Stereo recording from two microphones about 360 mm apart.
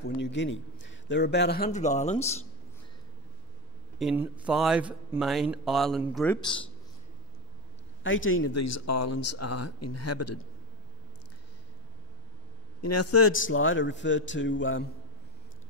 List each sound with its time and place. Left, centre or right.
0.0 s a man's voice: left
4.0 s speech: centre
8.0 s speech: left
12.8 s a man's voice: left